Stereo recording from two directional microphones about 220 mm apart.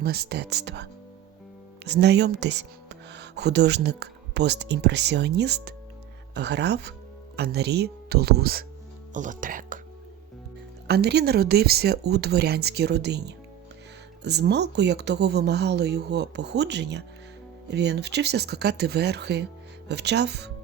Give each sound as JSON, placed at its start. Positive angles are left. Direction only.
{"t": 0.0, "sound": "speech", "side_deg": -45}
{"t": 10.8, "sound": "speech", "side_deg": -45}